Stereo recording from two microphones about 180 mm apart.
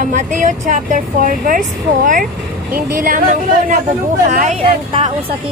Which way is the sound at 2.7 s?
50° right (ahead or behind).